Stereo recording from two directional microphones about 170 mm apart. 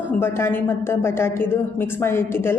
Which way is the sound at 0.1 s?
15° left (ahead or behind).